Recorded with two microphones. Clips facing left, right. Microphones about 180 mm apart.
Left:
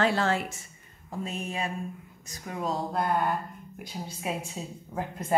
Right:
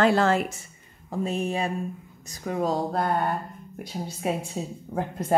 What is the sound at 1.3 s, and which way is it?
A woman's voice, 35° right (ahead or behind).